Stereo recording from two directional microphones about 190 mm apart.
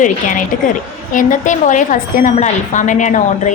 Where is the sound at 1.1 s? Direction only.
40° left (ahead or behind).